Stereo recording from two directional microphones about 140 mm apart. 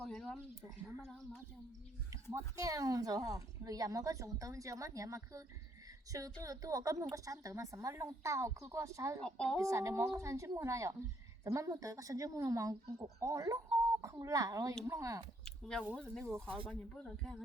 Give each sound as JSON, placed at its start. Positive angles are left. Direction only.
{"t": 0.0, "sound": "speech", "side_deg": 5}
{"t": 2.3, "sound": "a woman's voice", "side_deg": -25}
{"t": 9.2, "sound": "speech", "side_deg": 5}
{"t": 9.6, "sound": "a woman's voice", "side_deg": -20}
{"t": 15.4, "sound": "a sound", "side_deg": 5}
{"t": 16.0, "sound": "speech", "side_deg": 5}